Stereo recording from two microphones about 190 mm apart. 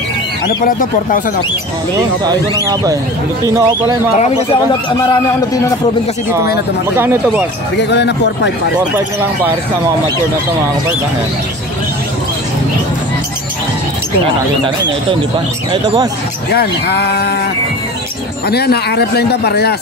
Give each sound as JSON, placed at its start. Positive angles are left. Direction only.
{"t": 0.7, "sound": "speech", "side_deg": 45}
{"t": 2.2, "sound": "speech", "side_deg": -20}
{"t": 7.7, "sound": "speech", "side_deg": 65}
{"t": 15.7, "sound": "speech", "side_deg": -25}
{"t": 16.5, "sound": "speech", "side_deg": 60}
{"t": 18.5, "sound": "speech", "side_deg": 55}